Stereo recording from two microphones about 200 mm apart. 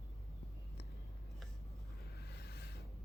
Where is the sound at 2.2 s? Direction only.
55° left (ahead or behind).